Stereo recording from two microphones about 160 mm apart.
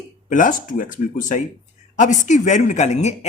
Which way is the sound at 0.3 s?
55° left (ahead or behind).